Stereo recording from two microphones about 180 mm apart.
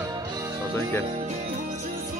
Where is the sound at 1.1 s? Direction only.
35° right (ahead or behind).